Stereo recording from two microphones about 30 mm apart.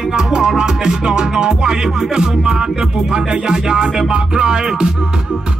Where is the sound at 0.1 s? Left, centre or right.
Right.